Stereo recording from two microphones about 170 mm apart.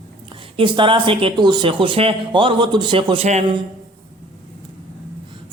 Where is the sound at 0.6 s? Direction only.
30° right (ahead or behind).